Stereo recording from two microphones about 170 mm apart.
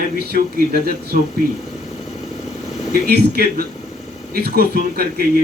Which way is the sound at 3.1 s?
65° right (ahead or behind).